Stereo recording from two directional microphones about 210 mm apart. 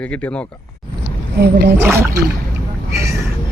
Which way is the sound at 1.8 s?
10° right (ahead or behind).